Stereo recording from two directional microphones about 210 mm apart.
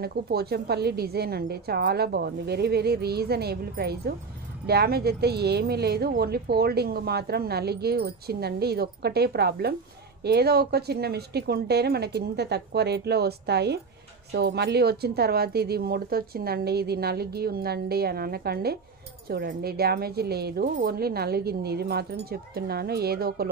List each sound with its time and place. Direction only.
0.0 s a woman's voice: 50° right (ahead or behind)